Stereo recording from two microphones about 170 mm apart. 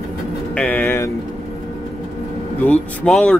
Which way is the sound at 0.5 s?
10° left (ahead or behind).